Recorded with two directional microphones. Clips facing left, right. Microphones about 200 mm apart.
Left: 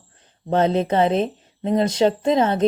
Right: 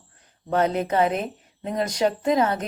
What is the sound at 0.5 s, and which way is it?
Speech, 25° left (ahead or behind).